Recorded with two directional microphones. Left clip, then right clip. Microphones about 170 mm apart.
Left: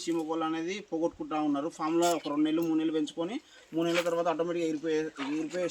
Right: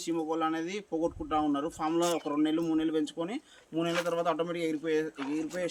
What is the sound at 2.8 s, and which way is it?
Speech, 30° right (ahead or behind).